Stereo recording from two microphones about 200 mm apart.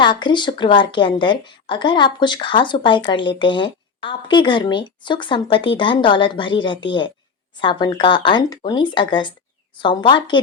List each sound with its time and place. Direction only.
0.0 s a woman's voice: 25° left (ahead or behind)